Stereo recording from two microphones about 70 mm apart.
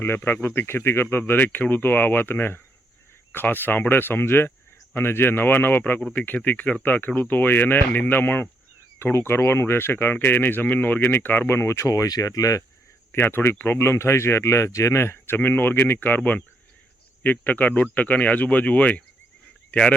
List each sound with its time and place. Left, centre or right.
0.0 s speech: left
5.8 s speech: centre; by 12.6 s left
13.1 s speech: left